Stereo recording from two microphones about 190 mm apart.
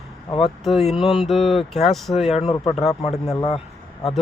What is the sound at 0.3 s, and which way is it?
Speech, 25° left (ahead or behind).